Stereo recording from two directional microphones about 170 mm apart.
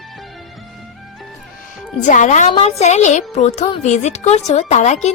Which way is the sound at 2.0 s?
45° left (ahead or behind).